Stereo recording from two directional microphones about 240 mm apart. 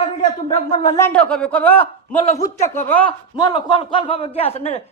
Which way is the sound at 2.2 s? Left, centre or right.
Left.